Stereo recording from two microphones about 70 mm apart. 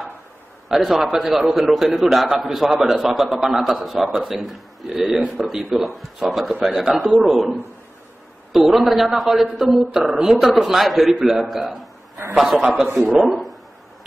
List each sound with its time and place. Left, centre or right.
0.7 s a man's voice: centre
8.5 s a man's voice: centre